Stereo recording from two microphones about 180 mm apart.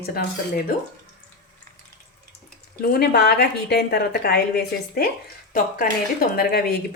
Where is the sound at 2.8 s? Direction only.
60° left (ahead or behind).